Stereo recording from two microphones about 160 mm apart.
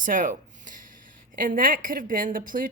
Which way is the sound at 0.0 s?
55° right (ahead or behind).